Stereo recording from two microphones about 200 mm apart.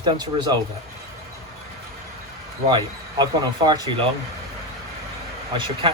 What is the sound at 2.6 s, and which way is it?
Speech, 20° right (ahead or behind).